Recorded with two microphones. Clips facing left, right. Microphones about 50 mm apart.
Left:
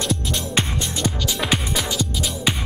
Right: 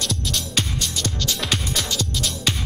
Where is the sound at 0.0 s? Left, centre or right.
Left.